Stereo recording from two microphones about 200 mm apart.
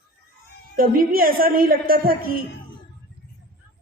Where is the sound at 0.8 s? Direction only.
45° right (ahead or behind).